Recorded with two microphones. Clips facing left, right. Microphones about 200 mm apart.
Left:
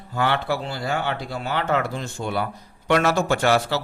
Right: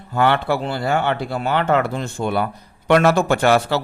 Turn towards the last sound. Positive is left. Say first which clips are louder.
# right 4 dB
turn(degrees=-60)  # may be behind; listen again after turning